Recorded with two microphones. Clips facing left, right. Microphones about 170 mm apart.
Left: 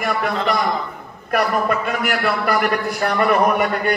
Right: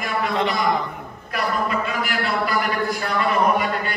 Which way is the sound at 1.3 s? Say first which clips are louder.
Left 5 dB; 55° left (ahead or behind).